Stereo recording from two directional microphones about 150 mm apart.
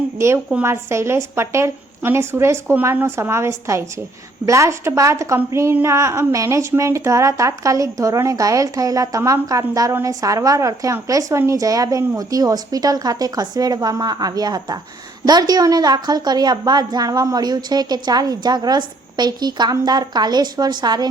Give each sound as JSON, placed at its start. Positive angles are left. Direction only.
{"t": 0.5, "sound": "a woman's voice", "side_deg": -15}